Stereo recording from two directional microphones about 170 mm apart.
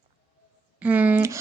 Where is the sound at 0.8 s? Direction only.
10° right (ahead or behind).